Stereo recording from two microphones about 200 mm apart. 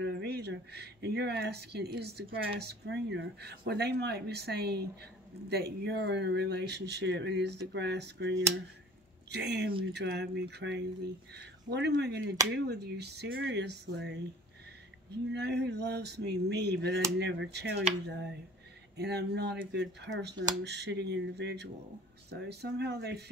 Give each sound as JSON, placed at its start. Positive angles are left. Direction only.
{"t": 0.0, "sound": "speech", "side_deg": -55}
{"t": 18.9, "sound": "speech", "side_deg": -55}